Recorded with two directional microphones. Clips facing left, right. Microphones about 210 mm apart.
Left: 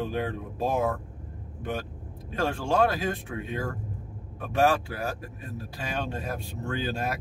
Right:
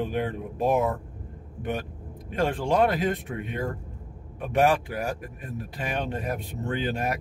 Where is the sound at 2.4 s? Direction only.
15° right (ahead or behind).